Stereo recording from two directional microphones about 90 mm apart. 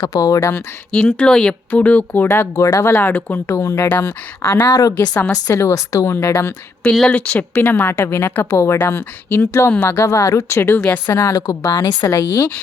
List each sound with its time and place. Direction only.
0.0 s speech: 40° left (ahead or behind)
0.5 s speech: 15° left (ahead or behind)
2.2 s speech: 30° left (ahead or behind)
3.6 s speech: 35° left (ahead or behind)
3.9 s speech: 20° left (ahead or behind)
4.6 s a woman's voice: 40° left (ahead or behind)
7.1 s speech: 15° left (ahead or behind)
11.1 s speech: 35° left (ahead or behind)
12.0 s speech: 25° left (ahead or behind)